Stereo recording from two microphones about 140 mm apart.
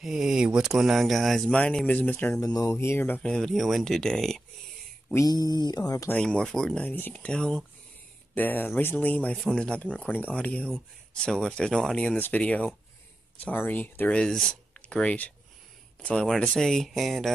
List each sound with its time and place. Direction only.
0.0 s speech: 5° right (ahead or behind)
2.5 s speech: 20° left (ahead or behind); by 4.4 s 5° left (ahead or behind)
5.1 s mantra: 25° left (ahead or behind)
6.0 s speech: 5° left (ahead or behind)